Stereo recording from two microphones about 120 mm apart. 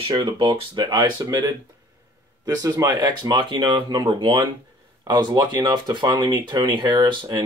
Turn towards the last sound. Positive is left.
turn(degrees=-40)  # may be behind; listen again after turning